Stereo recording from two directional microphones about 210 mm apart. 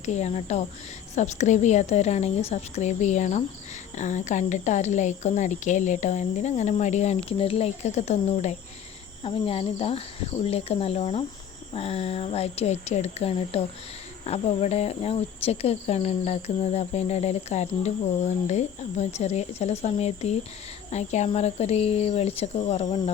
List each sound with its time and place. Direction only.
0.0 s speech: 30° left (ahead or behind)